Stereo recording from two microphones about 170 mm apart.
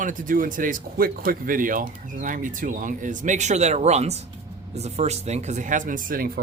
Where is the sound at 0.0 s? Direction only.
50° right (ahead or behind).